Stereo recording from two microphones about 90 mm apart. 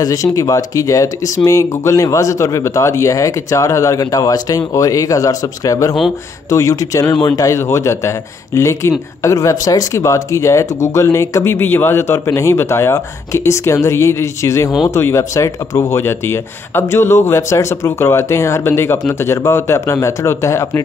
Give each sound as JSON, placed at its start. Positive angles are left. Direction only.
{"t": 0.0, "sound": "speech", "side_deg": 45}
{"t": 7.5, "sound": "speech", "side_deg": 30}
{"t": 16.0, "sound": "speech", "side_deg": 25}